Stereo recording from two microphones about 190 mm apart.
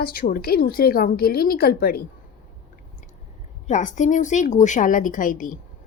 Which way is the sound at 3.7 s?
40° left (ahead or behind).